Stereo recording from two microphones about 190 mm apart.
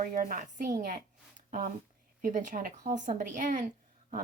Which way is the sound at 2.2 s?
40° right (ahead or behind).